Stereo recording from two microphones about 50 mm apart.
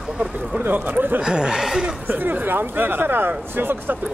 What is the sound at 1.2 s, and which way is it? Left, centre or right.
Speech, centre.